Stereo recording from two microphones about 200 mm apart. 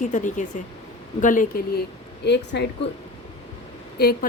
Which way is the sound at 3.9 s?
50° left (ahead or behind).